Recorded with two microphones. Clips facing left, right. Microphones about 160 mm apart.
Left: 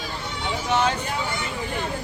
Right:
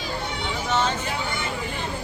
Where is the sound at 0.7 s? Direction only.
10° left (ahead or behind).